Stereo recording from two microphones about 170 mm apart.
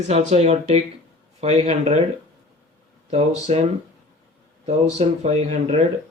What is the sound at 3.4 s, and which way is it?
Speech, 40° right (ahead or behind).